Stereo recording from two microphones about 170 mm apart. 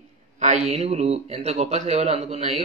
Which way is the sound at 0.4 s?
45° right (ahead or behind).